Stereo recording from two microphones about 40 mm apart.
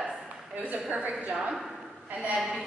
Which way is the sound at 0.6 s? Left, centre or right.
Right.